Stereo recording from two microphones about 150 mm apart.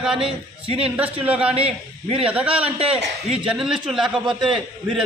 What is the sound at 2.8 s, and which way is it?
Speech, 40° right (ahead or behind).